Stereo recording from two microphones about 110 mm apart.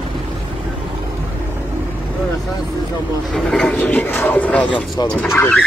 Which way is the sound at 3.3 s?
5° left (ahead or behind).